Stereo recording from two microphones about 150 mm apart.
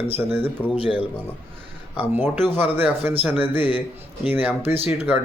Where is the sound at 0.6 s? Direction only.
10° left (ahead or behind).